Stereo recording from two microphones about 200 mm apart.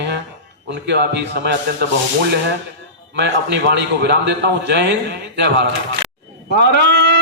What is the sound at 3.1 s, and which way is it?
A man's voice, 60° right (ahead or behind).